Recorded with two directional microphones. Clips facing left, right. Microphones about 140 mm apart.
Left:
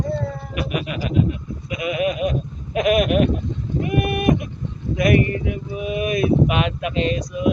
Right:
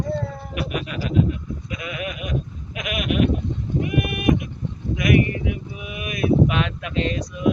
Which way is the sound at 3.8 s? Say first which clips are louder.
Left 2 dB; 35° left (ahead or behind).